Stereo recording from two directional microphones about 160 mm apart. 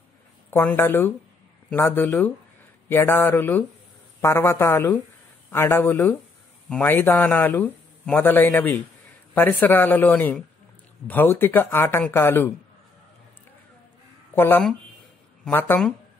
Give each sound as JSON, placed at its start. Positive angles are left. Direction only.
{"t": 0.5, "sound": "a man's voice", "side_deg": 15}
{"t": 14.3, "sound": "a man's voice", "side_deg": 15}